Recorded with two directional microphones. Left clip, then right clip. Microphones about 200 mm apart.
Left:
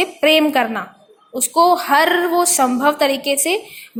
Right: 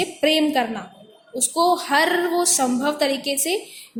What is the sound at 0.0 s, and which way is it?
Speech, 15° left (ahead or behind).